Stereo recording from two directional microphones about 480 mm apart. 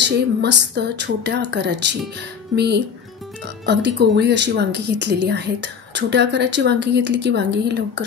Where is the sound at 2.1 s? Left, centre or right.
Right.